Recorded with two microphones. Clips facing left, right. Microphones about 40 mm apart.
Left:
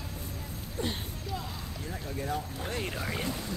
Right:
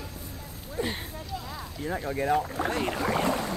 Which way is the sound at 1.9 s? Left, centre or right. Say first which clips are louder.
Right 9 dB; right.